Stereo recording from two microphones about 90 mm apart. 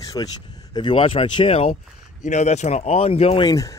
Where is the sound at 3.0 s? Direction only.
90° left.